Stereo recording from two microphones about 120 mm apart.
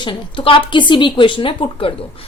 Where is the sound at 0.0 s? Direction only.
45° left (ahead or behind).